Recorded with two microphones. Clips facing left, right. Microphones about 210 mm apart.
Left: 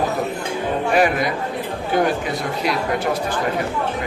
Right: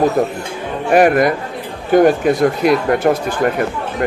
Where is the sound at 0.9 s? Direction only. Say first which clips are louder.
Right 8 dB; 55° right (ahead or behind).